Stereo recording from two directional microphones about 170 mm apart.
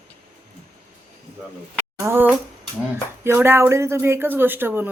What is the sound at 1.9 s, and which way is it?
Speech, 15° right (ahead or behind).